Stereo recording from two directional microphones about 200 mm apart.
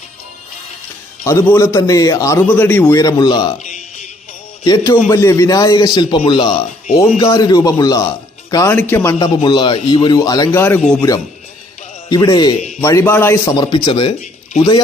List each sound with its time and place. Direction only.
1.2 s a man's voice: 15° left (ahead or behind)
3.6 s music: 35° left (ahead or behind)
4.6 s a man's voice: 20° left (ahead or behind); by 11.0 s 5° left (ahead or behind)
12.0 s a man's voice: 20° left (ahead or behind)